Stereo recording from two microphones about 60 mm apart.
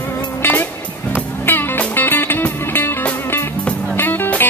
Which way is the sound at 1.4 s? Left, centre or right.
Left.